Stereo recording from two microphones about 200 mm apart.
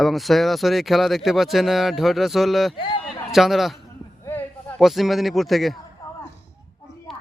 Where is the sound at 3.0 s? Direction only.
Centre (ahead or behind).